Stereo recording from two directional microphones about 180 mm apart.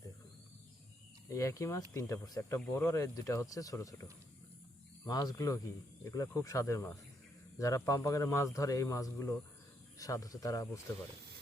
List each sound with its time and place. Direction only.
1.3 s speech: 15° left (ahead or behind)
5.0 s speech: 20° left (ahead or behind)